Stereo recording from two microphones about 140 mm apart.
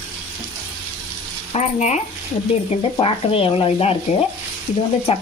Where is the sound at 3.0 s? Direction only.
40° left (ahead or behind).